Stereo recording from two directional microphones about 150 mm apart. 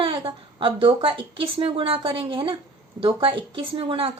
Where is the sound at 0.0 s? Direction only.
35° right (ahead or behind).